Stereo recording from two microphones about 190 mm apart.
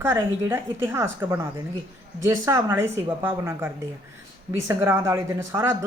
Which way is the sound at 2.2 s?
15° right (ahead or behind).